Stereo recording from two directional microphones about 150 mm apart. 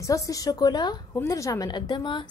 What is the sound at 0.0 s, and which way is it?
A woman's voice, 20° left (ahead or behind).